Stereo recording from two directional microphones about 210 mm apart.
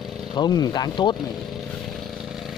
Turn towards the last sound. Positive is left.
turn(degrees=20)  # may be behind; listen again after turning